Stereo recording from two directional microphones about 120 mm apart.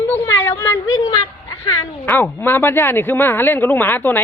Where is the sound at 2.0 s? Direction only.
15° left (ahead or behind).